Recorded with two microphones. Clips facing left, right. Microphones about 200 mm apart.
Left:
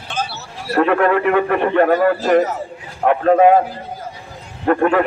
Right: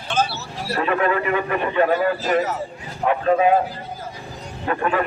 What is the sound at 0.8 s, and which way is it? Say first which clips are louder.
A man's voice: left 6 dB; 60° left (ahead or behind).